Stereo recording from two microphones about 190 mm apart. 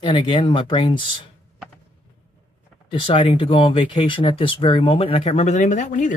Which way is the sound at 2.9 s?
25° left (ahead or behind).